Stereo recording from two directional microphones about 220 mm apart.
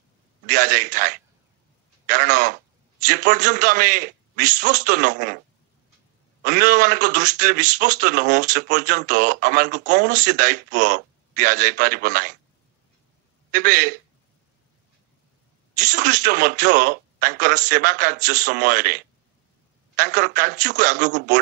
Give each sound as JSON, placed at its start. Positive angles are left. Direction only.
{"t": 0.5, "sound": "a man's voice", "side_deg": -35}
{"t": 6.4, "sound": "a man's voice", "side_deg": -35}
{"t": 13.5, "sound": "a man's voice", "side_deg": -35}
{"t": 15.8, "sound": "a man's voice", "side_deg": -35}